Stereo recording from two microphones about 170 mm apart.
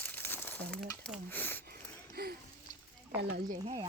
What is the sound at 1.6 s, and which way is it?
Wheeze, 65° right (ahead or behind).